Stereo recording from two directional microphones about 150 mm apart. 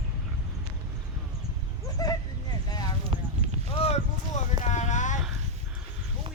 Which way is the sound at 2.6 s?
25° left (ahead or behind).